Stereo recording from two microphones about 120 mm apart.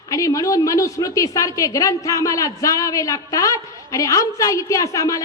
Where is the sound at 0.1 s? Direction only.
30° left (ahead or behind).